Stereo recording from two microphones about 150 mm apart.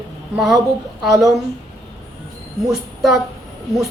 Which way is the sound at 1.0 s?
Centre (ahead or behind).